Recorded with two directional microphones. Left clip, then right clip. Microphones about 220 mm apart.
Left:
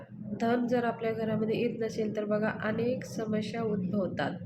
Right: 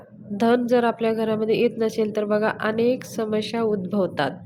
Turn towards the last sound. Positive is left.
turn(degrees=-40)  # may be behind; listen again after turning